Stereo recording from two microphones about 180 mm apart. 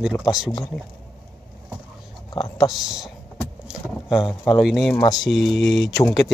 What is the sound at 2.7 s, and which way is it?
Speech, centre (ahead or behind).